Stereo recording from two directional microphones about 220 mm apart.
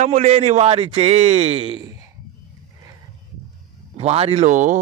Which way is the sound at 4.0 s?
30° right (ahead or behind).